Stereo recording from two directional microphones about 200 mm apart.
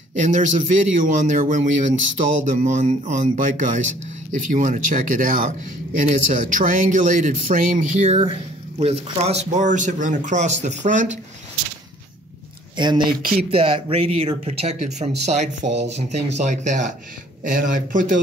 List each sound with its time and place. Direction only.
0.2 s speech: 35° right (ahead or behind)
12.7 s speech: 25° right (ahead or behind); by 18.2 s 40° right (ahead or behind)